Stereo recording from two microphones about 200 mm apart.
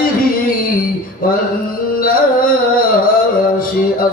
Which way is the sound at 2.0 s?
45° left (ahead or behind).